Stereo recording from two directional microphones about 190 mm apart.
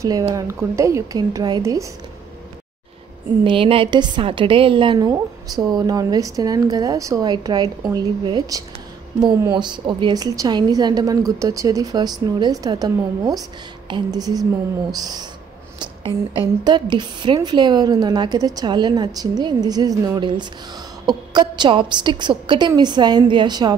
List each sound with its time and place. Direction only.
0.3 s a woman's voice: 15° right (ahead or behind)
3.4 s a woman's voice: 25° right (ahead or behind)